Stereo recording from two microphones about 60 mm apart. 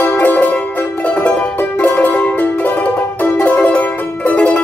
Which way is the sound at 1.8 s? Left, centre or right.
Left.